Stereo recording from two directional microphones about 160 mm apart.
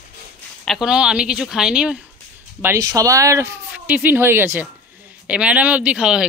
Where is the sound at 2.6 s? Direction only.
20° right (ahead or behind).